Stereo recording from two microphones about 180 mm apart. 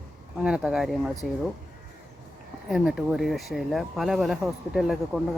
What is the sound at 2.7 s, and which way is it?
Speech, centre (ahead or behind).